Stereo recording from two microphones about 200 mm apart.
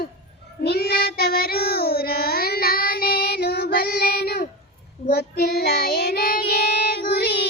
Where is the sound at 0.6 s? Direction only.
50° left (ahead or behind).